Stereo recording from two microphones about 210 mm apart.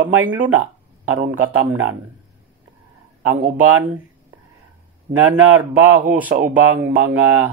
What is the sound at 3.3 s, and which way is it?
Speech, 10° right (ahead or behind).